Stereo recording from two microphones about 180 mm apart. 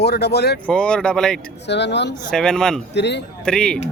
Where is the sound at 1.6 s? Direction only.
75° left (ahead or behind).